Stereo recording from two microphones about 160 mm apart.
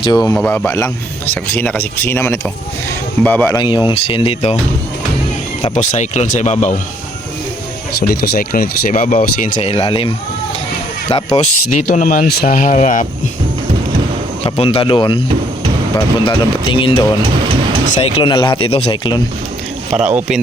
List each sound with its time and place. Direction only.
0.0 s speech: 25° left (ahead or behind)
0.3 s speech: 10° left (ahead or behind)
3.6 s speech: 30° left (ahead or behind)
5.7 s speech: 45° left (ahead or behind)
8.0 s speech: 80° left; by 9.5 s 55° left (ahead or behind)
9.6 s speech: 35° left (ahead or behind)
11.1 s speech: 40° left (ahead or behind)
14.4 s speech: 40° left (ahead or behind)
18.0 s speech: 30° left (ahead or behind)
19.9 s speech: 45° right (ahead or behind)